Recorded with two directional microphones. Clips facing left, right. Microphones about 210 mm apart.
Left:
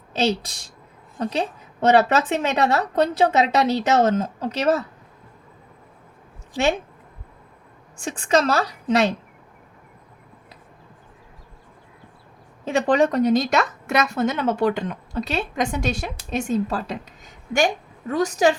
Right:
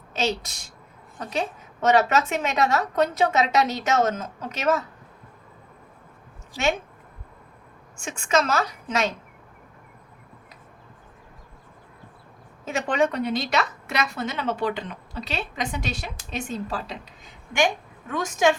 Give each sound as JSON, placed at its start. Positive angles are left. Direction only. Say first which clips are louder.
{"t": 0.3, "sound": "a woman's voice", "louder": "left 4 dB", "side_deg": 30}
{"t": 7.9, "sound": "a woman's voice", "louder": "left 3 dB", "side_deg": 35}
{"t": 12.6, "sound": "a woman's voice", "louder": "left 5 dB", "side_deg": 35}